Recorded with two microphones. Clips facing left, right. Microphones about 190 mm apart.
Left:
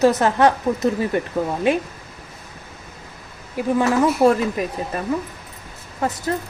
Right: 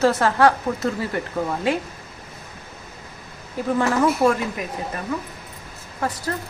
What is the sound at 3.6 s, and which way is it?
Speech, 15° left (ahead or behind).